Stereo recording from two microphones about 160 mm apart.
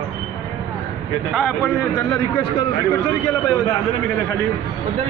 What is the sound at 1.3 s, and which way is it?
Speech, 5° left (ahead or behind).